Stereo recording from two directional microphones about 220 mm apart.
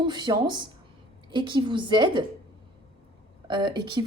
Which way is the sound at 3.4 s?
20° right (ahead or behind).